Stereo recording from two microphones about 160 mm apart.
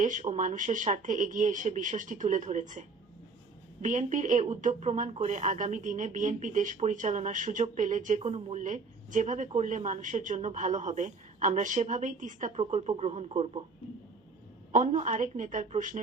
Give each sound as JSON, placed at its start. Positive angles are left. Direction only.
{"t": 0.0, "sound": "speech", "side_deg": -50}
{"t": 14.7, "sound": "speech", "side_deg": -50}